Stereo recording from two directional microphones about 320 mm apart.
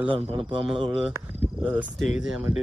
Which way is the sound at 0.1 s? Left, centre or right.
Centre.